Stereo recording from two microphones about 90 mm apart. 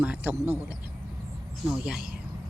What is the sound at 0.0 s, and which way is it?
Speech, 20° right (ahead or behind).